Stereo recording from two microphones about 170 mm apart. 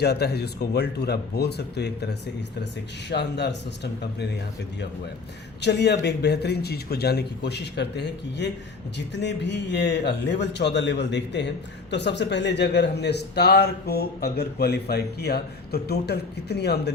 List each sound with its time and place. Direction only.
0.0 s a man's voice: 75° left (ahead or behind)
4.0 s a man's voice: 75° left (ahead or behind)
5.6 s a man's voice: 85° left